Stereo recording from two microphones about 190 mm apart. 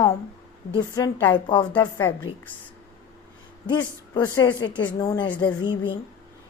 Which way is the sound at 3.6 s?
20° left (ahead or behind).